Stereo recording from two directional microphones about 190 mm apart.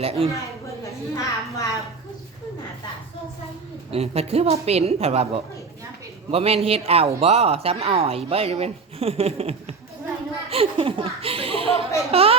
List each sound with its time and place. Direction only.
0.0 s speech: 30° right (ahead or behind)
0.9 s a woman's voice: 15° left (ahead or behind)
3.9 s a child's voice: 30° right (ahead or behind)